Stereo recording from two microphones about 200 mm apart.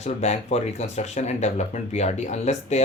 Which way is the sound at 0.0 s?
35° left (ahead or behind).